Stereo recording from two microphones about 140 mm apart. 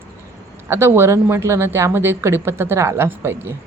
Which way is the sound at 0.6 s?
20° right (ahead or behind).